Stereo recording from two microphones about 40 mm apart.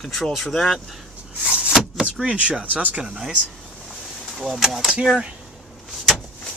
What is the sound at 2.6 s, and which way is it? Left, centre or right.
Speech, right.